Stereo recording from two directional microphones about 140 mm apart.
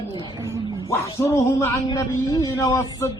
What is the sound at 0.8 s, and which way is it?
A man's voice, 20° left (ahead or behind).